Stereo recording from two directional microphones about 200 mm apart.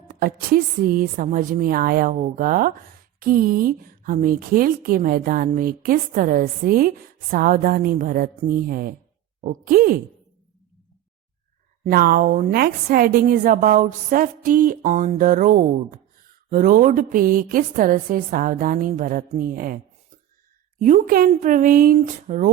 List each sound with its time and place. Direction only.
0.1 s a woman's voice: 45° right (ahead or behind)
11.9 s a woman's voice: 50° right (ahead or behind)